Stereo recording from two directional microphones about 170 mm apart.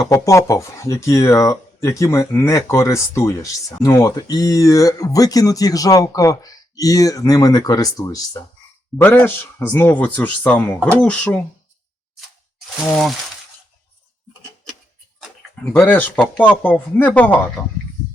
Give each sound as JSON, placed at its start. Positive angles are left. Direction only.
{"t": 0.1, "sound": "speech", "side_deg": 20}
{"t": 9.0, "sound": "speech", "side_deg": 10}
{"t": 14.7, "sound": "a sound", "side_deg": 5}
{"t": 15.6, "sound": "speech", "side_deg": 10}